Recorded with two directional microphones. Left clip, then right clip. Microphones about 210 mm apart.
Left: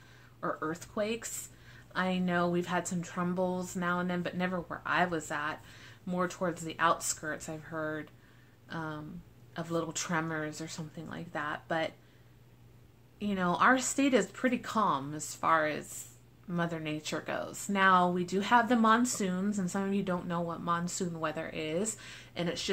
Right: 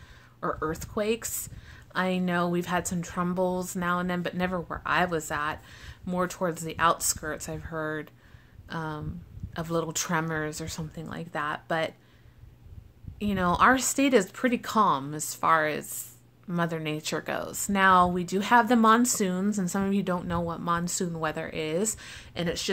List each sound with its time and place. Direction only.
0.4 s speech: 45° right (ahead or behind)
13.2 s speech: 45° right (ahead or behind)